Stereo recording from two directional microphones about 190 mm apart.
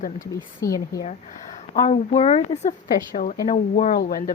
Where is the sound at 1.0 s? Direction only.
40° left (ahead or behind).